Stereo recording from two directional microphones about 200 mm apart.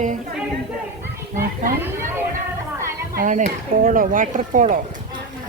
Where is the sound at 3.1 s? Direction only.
45° right (ahead or behind).